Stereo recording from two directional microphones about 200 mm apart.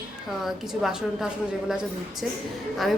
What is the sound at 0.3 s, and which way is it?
Speech, centre (ahead or behind).